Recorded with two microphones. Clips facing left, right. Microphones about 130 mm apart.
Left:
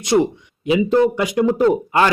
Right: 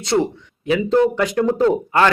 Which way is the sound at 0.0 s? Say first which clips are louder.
Left 2 dB; 15° left (ahead or behind).